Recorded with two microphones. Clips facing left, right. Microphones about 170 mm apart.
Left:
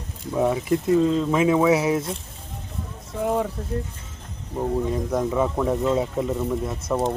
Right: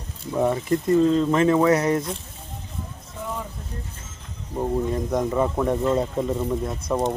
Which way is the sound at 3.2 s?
60° left (ahead or behind).